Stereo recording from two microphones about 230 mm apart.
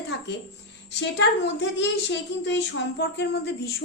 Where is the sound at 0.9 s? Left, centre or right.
Left.